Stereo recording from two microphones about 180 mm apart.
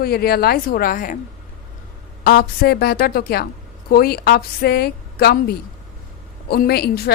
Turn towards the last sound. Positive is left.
turn(degrees=60)  # may be behind; listen again after turning